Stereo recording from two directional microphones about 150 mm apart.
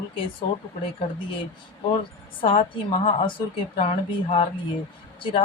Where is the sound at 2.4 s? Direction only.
35° left (ahead or behind).